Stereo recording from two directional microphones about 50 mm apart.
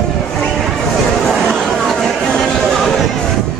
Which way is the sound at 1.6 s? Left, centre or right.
Centre.